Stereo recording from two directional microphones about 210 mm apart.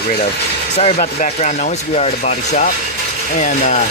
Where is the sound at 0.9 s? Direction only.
35° left (ahead or behind).